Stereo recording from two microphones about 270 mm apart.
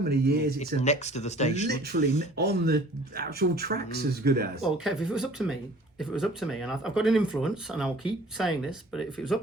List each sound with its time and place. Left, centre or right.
0.0 s speech: right
0.8 s speech: left
1.6 s speech: right
4.6 s speech: centre